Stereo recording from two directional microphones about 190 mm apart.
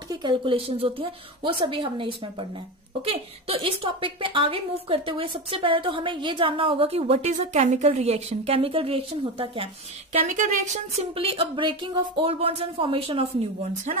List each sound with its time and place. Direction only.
0.1 s a woman's voice: 25° right (ahead or behind)
10.2 s a woman's voice: 40° right (ahead or behind)